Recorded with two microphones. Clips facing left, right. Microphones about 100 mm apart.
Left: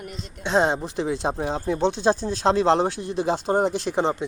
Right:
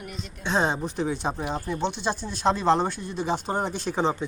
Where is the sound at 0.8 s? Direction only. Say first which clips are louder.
Left 2 dB; 90° left.